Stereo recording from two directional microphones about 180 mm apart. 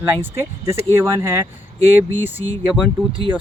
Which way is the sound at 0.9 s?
15° right (ahead or behind).